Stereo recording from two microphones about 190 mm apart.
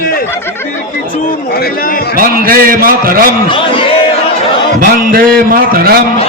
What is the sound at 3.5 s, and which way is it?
Speech, 25° left (ahead or behind).